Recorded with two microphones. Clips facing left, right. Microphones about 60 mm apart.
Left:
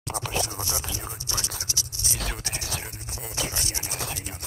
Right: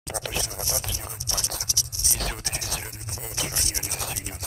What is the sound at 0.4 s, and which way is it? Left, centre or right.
Speech, left.